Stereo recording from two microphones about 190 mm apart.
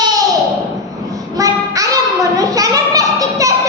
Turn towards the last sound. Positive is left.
turn(degrees=-20)  # may be behind; listen again after turning